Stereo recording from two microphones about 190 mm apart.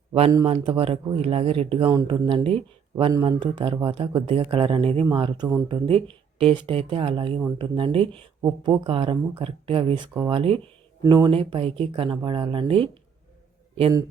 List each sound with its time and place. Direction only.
0.1 s speech: 25° right (ahead or behind)